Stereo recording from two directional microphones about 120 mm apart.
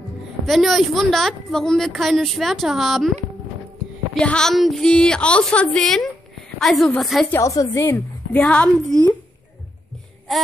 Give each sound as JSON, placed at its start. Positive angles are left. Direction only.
{"t": 0.5, "sound": "a woman's voice", "side_deg": 0}
{"t": 4.1, "sound": "a woman's voice", "side_deg": 5}
{"t": 7.2, "sound": "a woman's voice", "side_deg": 25}
{"t": 10.3, "sound": "a sound", "side_deg": 0}